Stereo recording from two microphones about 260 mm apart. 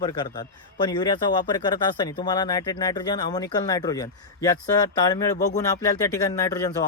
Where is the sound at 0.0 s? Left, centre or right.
Centre.